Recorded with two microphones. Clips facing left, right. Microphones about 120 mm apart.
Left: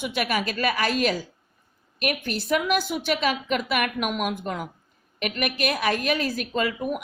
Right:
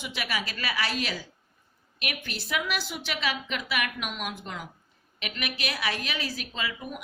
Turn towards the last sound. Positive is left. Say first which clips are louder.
# left 9 dB
turn(degrees=50)  # may be behind; listen again after turning